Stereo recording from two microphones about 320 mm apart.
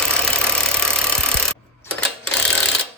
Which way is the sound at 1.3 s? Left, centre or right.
Centre.